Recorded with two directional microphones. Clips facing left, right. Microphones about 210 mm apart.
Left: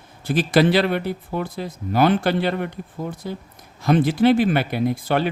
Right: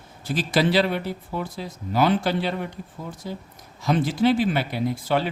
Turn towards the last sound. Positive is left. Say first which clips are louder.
# left 3 dB
turn(degrees=55)  # may be behind; listen again after turning